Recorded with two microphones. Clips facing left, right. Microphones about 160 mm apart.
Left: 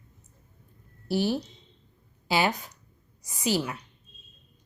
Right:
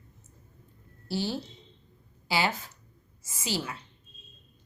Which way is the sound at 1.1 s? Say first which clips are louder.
Left 5 dB; 20° left (ahead or behind).